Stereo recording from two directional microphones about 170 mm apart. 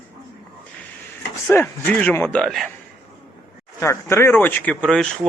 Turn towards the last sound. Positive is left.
turn(degrees=5)  # may be behind; listen again after turning